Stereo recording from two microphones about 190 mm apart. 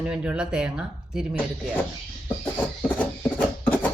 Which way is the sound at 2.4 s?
5° left (ahead or behind).